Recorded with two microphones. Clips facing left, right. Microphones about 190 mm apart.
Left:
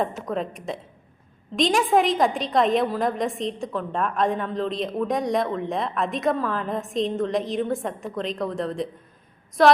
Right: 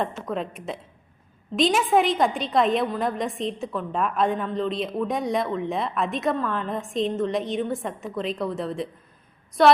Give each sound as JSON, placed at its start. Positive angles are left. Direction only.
{"t": 0.3, "sound": "a woman's voice", "side_deg": 0}